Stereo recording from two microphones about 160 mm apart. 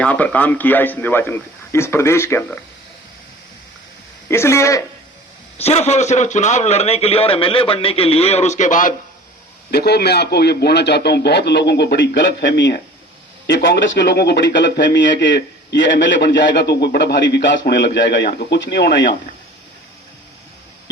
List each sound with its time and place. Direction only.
0.0 s speech: 10° left (ahead or behind)
4.3 s speech: 15° left (ahead or behind)
5.5 s a man's voice: 40° left (ahead or behind)
9.7 s speech: 90° left